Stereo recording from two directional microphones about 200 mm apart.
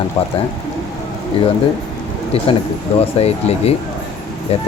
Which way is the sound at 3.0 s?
30° left (ahead or behind).